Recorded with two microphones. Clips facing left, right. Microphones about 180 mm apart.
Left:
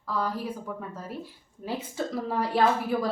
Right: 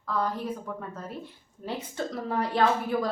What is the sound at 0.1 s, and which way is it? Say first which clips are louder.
Speech: right 1 dB; 5° left (ahead or behind).